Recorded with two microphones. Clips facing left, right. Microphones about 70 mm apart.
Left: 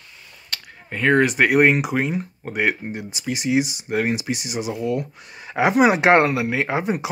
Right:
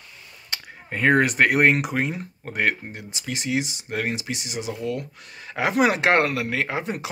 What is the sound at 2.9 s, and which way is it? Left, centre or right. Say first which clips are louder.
Speech: left 5 dB; centre.